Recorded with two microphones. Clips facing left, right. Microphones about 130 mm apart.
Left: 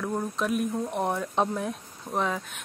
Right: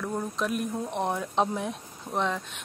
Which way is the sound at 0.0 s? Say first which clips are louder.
Left 1 dB; centre (ahead or behind).